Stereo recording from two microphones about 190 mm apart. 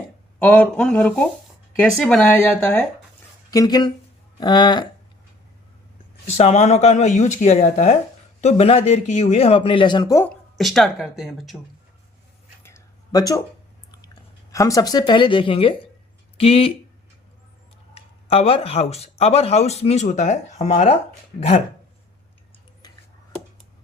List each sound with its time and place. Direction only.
0.3 s speech: 10° left (ahead or behind)
3.5 s speech: 20° left (ahead or behind)
6.3 s speech: 35° left (ahead or behind); by 10.2 s 20° left (ahead or behind)
10.2 s a woman's voice: centre (ahead or behind)
12.6 s a sound: 20° left (ahead or behind)
14.5 s speech: 15° left (ahead or behind)
17.9 s speech: 30° left (ahead or behind)